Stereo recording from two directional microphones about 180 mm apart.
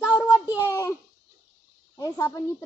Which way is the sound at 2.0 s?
15° left (ahead or behind).